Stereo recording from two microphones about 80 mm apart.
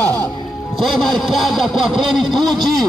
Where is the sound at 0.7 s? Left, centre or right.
Centre.